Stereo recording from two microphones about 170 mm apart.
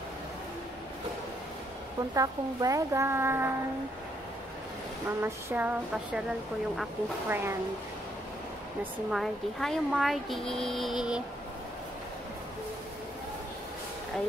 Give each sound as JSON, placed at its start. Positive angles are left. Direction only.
{"t": 2.1, "sound": "a woman's voice", "side_deg": -20}
{"t": 5.2, "sound": "a woman's voice", "side_deg": -10}
{"t": 7.2, "sound": "a woman's voice", "side_deg": -10}
{"t": 9.1, "sound": "speech", "side_deg": 0}